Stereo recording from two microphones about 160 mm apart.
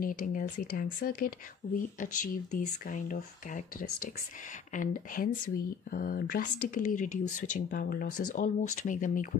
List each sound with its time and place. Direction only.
0.0 s speech: 60° left (ahead or behind)
4.7 s speech: 60° left (ahead or behind)